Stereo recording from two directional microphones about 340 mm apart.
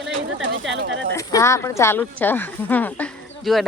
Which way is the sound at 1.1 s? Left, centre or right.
Centre.